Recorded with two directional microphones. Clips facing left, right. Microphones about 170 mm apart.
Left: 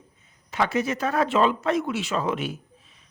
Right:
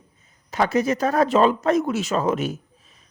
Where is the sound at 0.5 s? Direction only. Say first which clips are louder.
Right 4 dB; 40° right (ahead or behind).